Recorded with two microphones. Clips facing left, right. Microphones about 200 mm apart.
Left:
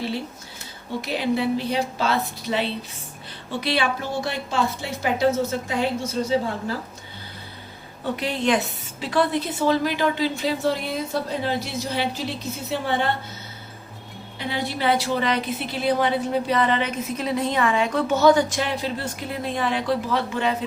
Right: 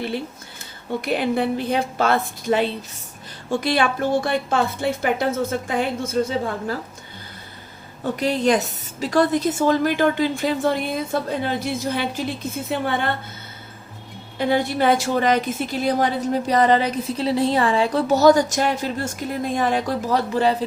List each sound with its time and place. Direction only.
1.0 s a woman's voice: 55° right (ahead or behind)
8.1 s a woman's voice: 40° right (ahead or behind)
14.3 s a woman's voice: 50° right (ahead or behind); by 20.7 s 35° right (ahead or behind)